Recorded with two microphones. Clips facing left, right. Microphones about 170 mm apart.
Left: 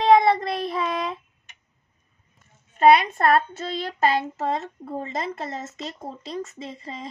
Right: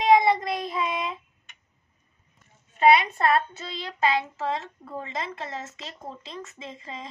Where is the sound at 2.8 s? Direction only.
50° left (ahead or behind).